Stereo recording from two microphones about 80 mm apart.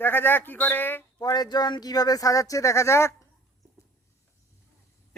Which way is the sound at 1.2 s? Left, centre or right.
Left.